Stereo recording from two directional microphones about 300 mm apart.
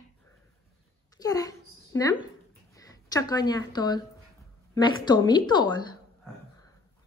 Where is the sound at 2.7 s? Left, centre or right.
Centre.